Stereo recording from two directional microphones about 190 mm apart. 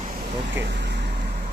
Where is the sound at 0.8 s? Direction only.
65° right (ahead or behind).